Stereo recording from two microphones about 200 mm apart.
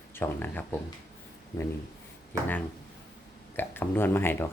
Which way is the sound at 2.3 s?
15° right (ahead or behind).